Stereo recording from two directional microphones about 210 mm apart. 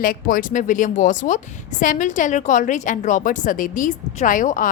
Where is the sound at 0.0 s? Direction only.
40° left (ahead or behind).